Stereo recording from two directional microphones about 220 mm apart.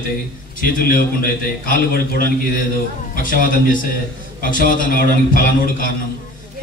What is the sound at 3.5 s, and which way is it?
A man's voice, 40° left (ahead or behind).